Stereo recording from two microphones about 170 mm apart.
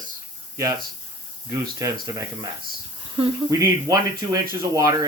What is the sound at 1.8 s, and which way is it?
Speech, 20° right (ahead or behind).